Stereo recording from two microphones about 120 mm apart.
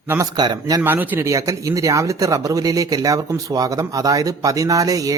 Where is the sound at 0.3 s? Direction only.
35° right (ahead or behind).